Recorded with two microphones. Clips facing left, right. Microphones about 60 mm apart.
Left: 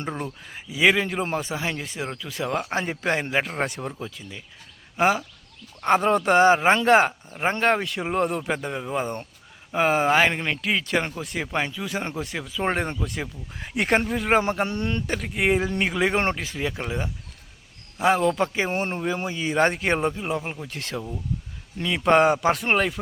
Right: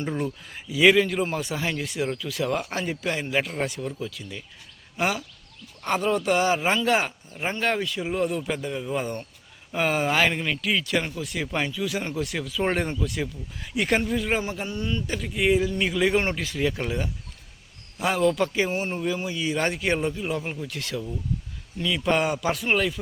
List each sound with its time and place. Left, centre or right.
0.1 s speech: centre; by 4.1 s left
4.2 s speech: centre
4.9 s speech: left
11.1 s speech: left
11.5 s speech: left
13.1 s speech: left
15.0 s speech: left
15.8 s speech: left
18.7 s speech: left
18.9 s speech: left
20.7 s speech: left